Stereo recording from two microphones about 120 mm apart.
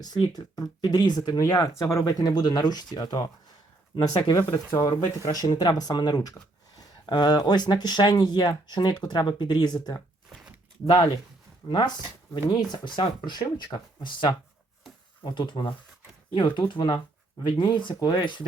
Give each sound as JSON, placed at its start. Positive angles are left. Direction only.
{"t": 0.0, "sound": "speech", "side_deg": 35}
{"t": 4.5, "sound": "speech", "side_deg": 30}
{"t": 10.2, "sound": "a sound", "side_deg": -5}
{"t": 10.8, "sound": "speech", "side_deg": 40}